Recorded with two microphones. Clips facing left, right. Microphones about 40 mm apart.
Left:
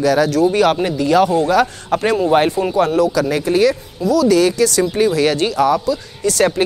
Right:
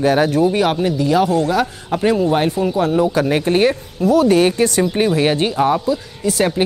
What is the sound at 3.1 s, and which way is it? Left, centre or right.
Speech, right.